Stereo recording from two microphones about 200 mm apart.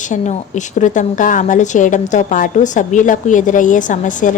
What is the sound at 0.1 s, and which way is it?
A woman's voice, 35° left (ahead or behind).